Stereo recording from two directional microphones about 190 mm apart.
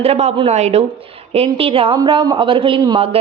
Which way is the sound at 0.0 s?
35° right (ahead or behind).